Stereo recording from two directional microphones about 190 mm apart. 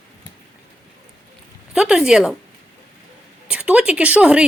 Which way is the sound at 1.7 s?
5° right (ahead or behind).